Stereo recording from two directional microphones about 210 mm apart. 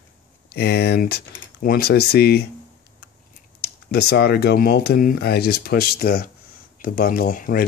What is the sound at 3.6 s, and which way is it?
Speech, 50° left (ahead or behind).